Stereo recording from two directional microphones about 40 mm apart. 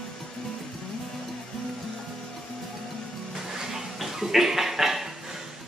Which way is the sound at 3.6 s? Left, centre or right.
Centre.